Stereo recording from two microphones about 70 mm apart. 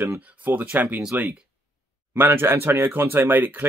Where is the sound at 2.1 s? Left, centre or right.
Right.